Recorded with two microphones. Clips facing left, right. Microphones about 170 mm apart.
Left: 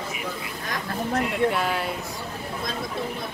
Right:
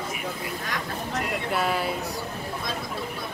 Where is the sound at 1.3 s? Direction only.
Centre (ahead or behind).